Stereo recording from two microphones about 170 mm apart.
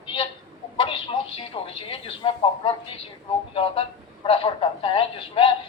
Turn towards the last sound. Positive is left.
turn(degrees=30)  # may be behind; listen again after turning